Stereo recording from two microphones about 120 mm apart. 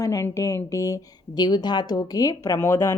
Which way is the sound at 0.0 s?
25° left (ahead or behind).